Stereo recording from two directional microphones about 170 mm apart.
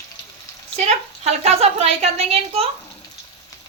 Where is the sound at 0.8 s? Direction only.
40° right (ahead or behind).